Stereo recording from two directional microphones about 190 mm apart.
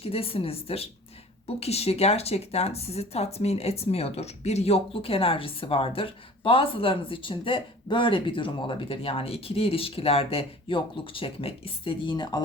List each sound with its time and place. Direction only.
0.0 s speech: 30° left (ahead or behind)